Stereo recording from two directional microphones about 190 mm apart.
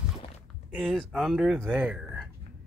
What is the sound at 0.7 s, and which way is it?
Speech, centre (ahead or behind).